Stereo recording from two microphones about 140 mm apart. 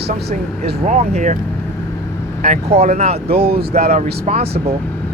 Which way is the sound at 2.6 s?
50° right (ahead or behind).